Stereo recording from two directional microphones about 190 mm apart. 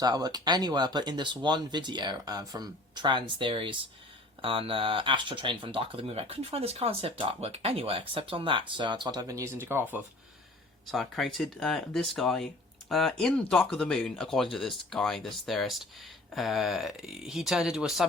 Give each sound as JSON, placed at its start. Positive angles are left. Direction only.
{"t": 0.0, "sound": "speech", "side_deg": -20}
{"t": 10.9, "sound": "speech", "side_deg": 0}